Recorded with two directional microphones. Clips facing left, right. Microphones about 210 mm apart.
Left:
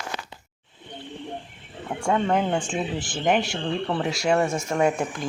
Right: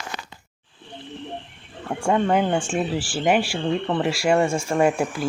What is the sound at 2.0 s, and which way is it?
Speech, 5° right (ahead or behind).